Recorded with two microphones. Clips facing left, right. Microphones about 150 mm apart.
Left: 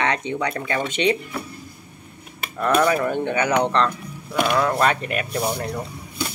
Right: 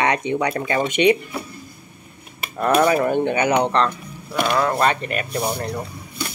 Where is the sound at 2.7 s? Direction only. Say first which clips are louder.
Right 2 dB; 30° right (ahead or behind).